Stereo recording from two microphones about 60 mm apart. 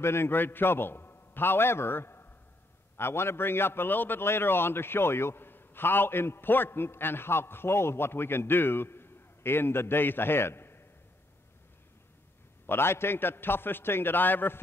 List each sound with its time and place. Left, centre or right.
0.0 s a man's voice: left
12.6 s a man's voice: left